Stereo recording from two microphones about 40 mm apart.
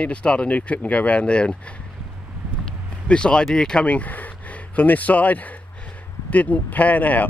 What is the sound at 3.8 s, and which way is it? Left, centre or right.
Speech, left.